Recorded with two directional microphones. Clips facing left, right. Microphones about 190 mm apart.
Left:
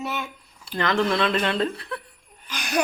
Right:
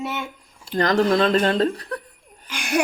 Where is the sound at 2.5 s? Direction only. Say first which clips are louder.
Right 3 dB; 25° right (ahead or behind).